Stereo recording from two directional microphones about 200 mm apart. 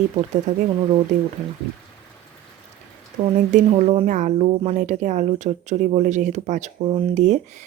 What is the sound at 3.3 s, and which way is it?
Speech, 40° right (ahead or behind).